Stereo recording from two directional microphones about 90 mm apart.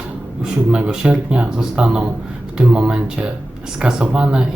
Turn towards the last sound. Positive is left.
turn(degrees=-10)  # may be behind; listen again after turning